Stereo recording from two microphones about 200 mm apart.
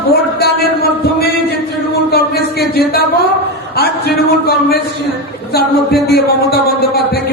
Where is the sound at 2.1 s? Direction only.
50° left (ahead or behind).